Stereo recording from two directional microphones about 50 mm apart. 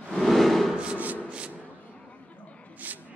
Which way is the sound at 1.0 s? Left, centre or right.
Right.